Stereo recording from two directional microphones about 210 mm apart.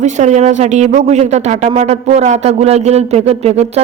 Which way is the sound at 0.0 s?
35° right (ahead or behind).